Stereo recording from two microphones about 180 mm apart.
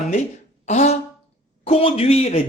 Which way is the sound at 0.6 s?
40° left (ahead or behind).